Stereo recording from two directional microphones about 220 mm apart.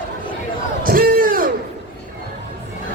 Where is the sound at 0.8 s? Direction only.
40° right (ahead or behind).